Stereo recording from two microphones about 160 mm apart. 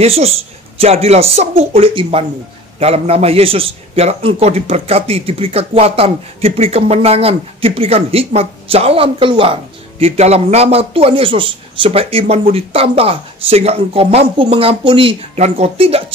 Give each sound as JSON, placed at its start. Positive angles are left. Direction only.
{"t": 0.0, "sound": "a man's voice", "side_deg": -40}